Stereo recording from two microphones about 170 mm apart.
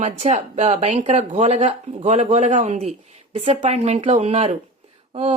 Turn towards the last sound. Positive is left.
turn(degrees=-35)  # may be behind; listen again after turning